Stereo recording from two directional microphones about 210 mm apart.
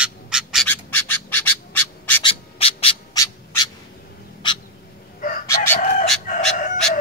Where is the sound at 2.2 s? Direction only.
25° left (ahead or behind).